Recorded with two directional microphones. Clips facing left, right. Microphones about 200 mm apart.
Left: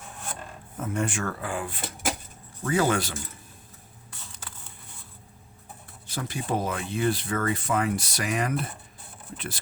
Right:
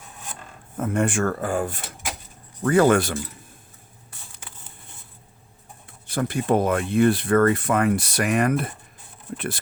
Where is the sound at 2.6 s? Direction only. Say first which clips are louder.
Right 7 dB; 55° right (ahead or behind).